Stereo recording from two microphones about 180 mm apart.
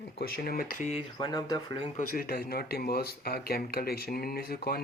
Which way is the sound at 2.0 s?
55° left (ahead or behind).